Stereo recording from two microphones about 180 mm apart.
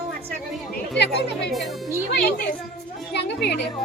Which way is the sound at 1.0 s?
70° left (ahead or behind).